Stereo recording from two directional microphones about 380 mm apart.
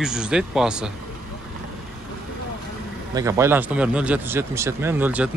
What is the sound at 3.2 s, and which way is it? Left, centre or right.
Speech, centre.